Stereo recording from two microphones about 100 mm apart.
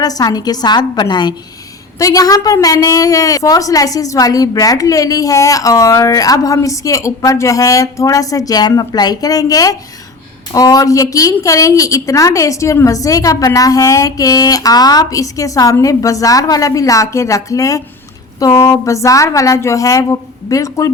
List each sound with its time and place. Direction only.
0.0 s speech: 40° left (ahead or behind)
2.0 s speech: 35° left (ahead or behind)